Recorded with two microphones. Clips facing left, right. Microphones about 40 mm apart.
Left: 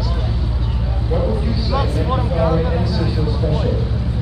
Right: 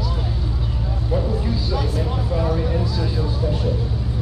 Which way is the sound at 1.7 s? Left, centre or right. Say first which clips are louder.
Left 4 dB; left.